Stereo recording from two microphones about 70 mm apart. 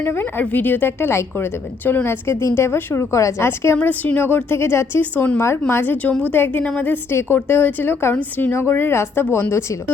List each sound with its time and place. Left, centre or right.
0.0 s a woman's voice: left
3.8 s a woman's voice: left
5.1 s a woman's voice: left
7.1 s speech: left
8.5 s speech: left